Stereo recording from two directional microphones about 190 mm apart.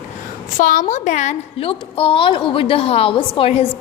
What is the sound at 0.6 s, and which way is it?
A woman's voice, 45° left (ahead or behind).